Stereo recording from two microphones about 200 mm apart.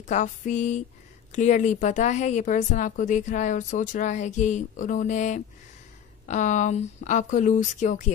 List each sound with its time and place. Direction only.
0.0 s speech: 35° left (ahead or behind)